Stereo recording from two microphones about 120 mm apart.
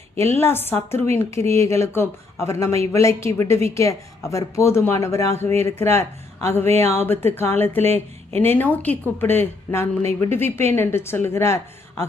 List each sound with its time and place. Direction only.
0.3 s speech: 20° left (ahead or behind)